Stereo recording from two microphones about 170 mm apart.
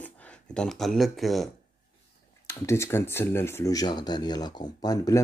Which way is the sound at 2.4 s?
15° left (ahead or behind).